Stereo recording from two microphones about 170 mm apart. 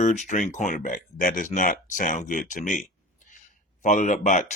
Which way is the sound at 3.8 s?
45° left (ahead or behind).